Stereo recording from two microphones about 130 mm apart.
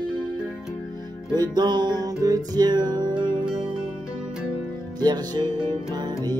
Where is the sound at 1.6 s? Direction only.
35° right (ahead or behind).